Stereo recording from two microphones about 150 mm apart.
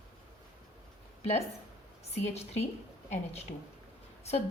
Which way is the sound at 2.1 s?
45° left (ahead or behind).